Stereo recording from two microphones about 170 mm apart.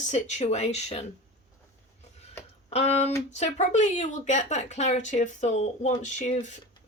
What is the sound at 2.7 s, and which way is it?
A woman's voice, 40° left (ahead or behind).